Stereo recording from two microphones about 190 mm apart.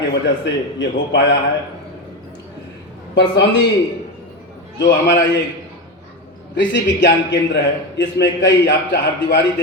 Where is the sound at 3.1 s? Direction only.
65° left (ahead or behind).